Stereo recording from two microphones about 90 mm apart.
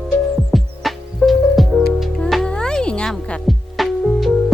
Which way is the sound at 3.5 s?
Centre (ahead or behind).